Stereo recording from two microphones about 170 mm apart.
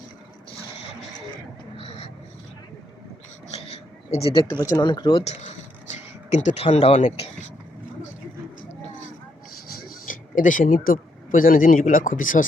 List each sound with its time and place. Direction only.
1.7 s vehicle: 35° left (ahead or behind)
3.5 s a sound: 35° left (ahead or behind)
4.4 s speech: 20° left (ahead or behind); by 7.3 s 40° left (ahead or behind)
9.8 s speech: 50° left (ahead or behind)